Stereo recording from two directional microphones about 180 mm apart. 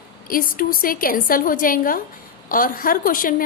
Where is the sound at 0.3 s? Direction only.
50° left (ahead or behind).